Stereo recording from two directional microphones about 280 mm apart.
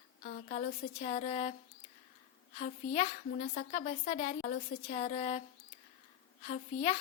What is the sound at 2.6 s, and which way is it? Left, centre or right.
A woman's voice, left.